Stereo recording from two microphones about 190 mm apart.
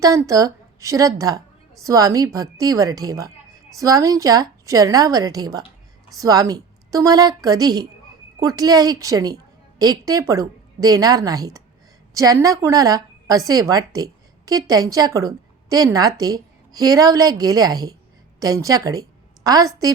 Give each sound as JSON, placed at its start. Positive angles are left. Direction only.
{"t": 0.0, "sound": "a woman's voice", "side_deg": -15}